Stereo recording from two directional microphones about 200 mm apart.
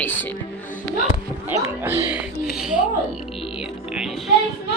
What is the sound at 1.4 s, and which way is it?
Speech, 10° right (ahead or behind).